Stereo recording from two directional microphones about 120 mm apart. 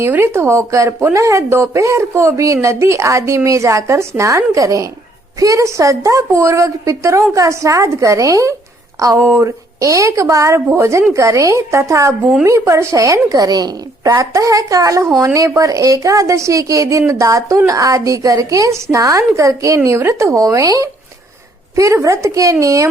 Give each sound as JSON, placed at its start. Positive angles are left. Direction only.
{"t": 0.0, "sound": "speech", "side_deg": -20}